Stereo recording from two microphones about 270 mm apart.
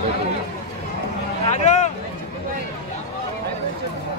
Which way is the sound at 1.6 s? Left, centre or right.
Left.